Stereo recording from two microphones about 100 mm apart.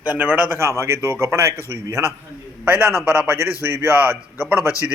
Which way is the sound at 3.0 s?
25° right (ahead or behind).